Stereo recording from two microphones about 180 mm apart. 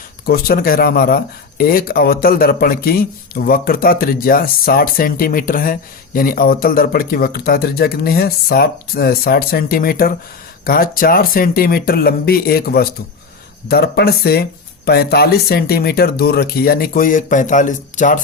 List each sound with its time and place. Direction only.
0.3 s speech: 60° left (ahead or behind)